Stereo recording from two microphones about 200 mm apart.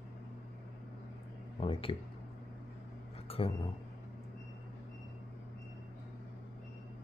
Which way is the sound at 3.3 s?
30° left (ahead or behind).